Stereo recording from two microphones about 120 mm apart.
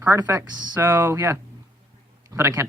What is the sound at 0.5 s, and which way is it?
Speech, 35° right (ahead or behind).